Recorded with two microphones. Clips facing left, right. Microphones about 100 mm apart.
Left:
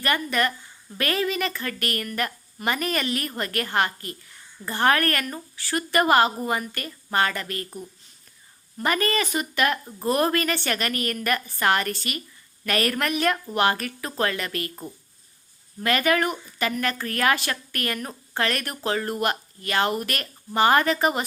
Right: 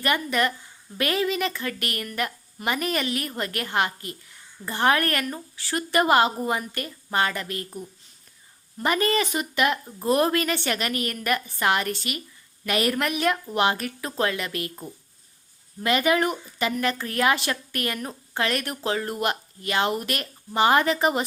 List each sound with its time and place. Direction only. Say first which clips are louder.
0.0 s a woman's voice: even; 15° right (ahead or behind)
8.8 s a woman's voice: right 1 dB; 20° right (ahead or behind)
15.8 s a woman's voice: right 1 dB; 20° right (ahead or behind)